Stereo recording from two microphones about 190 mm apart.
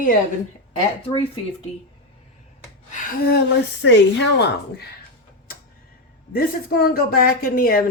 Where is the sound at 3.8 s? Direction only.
70° left (ahead or behind).